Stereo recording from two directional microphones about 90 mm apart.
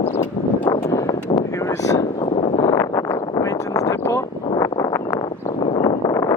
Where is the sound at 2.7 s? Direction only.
40° left (ahead or behind).